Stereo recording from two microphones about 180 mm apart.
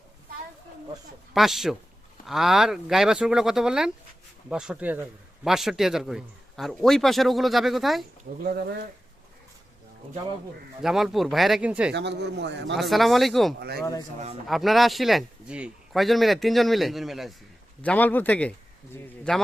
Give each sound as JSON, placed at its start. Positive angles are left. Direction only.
{"t": 1.3, "sound": "speech", "side_deg": 0}
{"t": 8.4, "sound": "speech", "side_deg": -60}
{"t": 10.8, "sound": "speech", "side_deg": 0}
{"t": 11.9, "sound": "a man's voice", "side_deg": -70}
{"t": 12.7, "sound": "speech", "side_deg": 0}
{"t": 13.6, "sound": "speech", "side_deg": -65}
{"t": 14.4, "sound": "a man's voice", "side_deg": 0}